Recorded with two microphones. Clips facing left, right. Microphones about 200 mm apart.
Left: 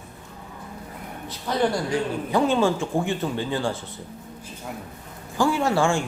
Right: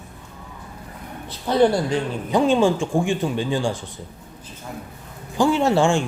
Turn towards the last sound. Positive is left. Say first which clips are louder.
# right 4 dB
turn(degrees=-20)  # may be behind; listen again after turning